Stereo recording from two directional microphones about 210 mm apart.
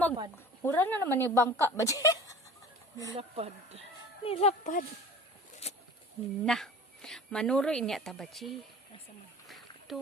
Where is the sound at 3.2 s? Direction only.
30° right (ahead or behind).